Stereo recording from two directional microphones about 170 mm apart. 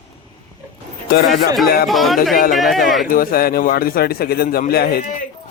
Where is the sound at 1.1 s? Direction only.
65° left (ahead or behind).